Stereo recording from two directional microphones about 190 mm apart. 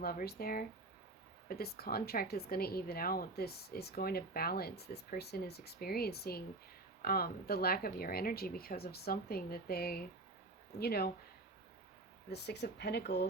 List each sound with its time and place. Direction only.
0.0 s a woman's voice: 50° left (ahead or behind)
12.3 s a woman's voice: 60° left (ahead or behind)